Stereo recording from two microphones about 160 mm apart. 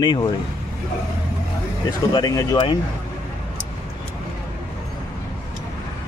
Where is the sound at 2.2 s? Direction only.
25° left (ahead or behind).